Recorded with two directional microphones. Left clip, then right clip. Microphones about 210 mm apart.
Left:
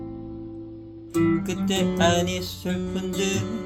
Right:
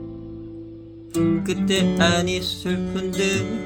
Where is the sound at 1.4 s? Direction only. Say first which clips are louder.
Right 4 dB; 20° right (ahead or behind).